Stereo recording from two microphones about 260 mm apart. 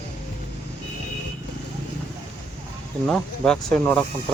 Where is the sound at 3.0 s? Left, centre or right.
Centre.